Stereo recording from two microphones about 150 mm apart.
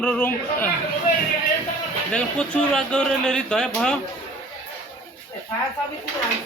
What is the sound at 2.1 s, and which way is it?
Speech, 5° left (ahead or behind).